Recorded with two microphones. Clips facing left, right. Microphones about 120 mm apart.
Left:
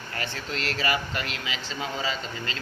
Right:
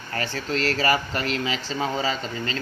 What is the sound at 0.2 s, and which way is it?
Speech, 40° right (ahead or behind).